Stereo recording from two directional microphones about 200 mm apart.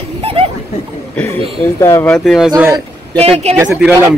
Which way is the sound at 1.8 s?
15° left (ahead or behind).